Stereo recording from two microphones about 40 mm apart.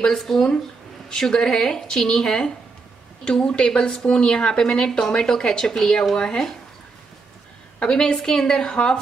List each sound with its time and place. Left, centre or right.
0.1 s speech: centre
7.8 s speech: centre